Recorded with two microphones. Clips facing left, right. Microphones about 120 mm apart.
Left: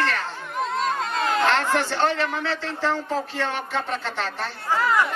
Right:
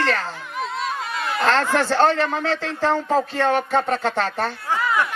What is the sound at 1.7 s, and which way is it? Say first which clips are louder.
Speech: right 5 dB; 45° right (ahead or behind).